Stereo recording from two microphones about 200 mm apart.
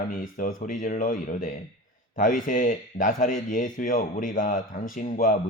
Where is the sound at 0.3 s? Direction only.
45° left (ahead or behind).